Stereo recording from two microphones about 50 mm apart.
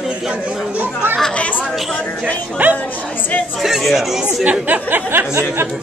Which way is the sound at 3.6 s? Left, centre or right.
Centre.